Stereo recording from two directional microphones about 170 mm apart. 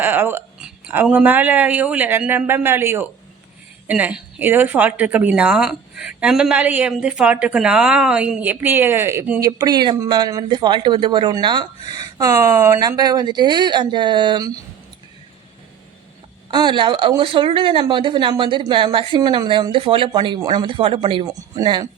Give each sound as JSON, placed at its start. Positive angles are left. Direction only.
{"t": 0.0, "sound": "speech", "side_deg": -10}
{"t": 16.5, "sound": "speech", "side_deg": -25}